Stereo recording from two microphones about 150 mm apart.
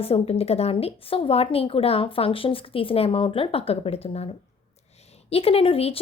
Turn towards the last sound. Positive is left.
turn(degrees=40)  # may be behind; listen again after turning